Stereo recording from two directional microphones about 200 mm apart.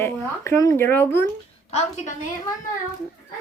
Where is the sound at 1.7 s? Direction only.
35° left (ahead or behind).